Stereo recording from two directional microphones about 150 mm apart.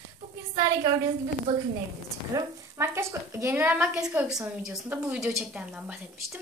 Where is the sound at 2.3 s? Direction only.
20° right (ahead or behind).